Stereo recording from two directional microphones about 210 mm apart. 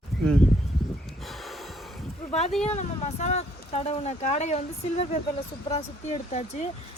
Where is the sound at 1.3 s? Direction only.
Centre (ahead or behind).